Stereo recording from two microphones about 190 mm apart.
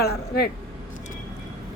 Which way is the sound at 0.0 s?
55° left (ahead or behind).